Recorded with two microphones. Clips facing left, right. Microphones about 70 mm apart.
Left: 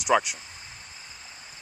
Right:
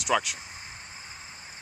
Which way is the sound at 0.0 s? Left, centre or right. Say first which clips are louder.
Left 4 dB; centre.